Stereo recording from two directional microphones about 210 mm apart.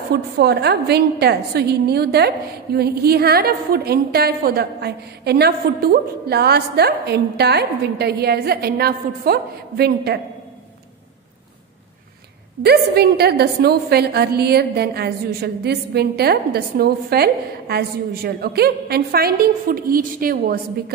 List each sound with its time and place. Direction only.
0.1 s a woman's voice: 50° right (ahead or behind)
12.6 s a woman's voice: 50° right (ahead or behind)